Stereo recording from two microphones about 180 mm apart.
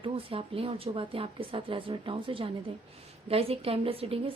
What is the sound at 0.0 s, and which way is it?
A woman's voice, 30° right (ahead or behind).